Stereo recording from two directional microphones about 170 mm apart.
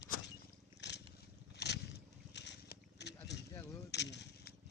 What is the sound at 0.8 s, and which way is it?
Cat, 90° left.